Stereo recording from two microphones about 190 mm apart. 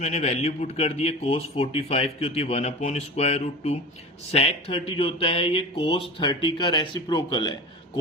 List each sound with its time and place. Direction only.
0.0 s a man's voice: 40° left (ahead or behind)